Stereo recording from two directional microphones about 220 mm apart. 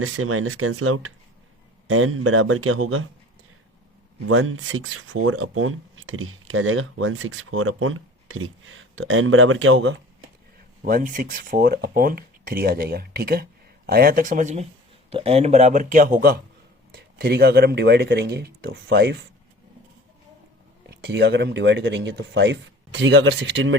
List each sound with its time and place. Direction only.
0.0 s speech: 70° right (ahead or behind)
4.3 s speech: 65° right (ahead or behind)
10.8 s speech: 40° right (ahead or behind)
20.9 s speech: 50° right (ahead or behind)